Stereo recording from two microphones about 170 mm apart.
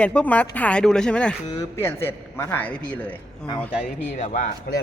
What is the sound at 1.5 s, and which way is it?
A man's voice, 15° left (ahead or behind).